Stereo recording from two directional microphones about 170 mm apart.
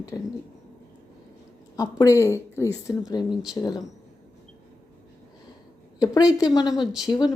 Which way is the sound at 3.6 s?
20° left (ahead or behind).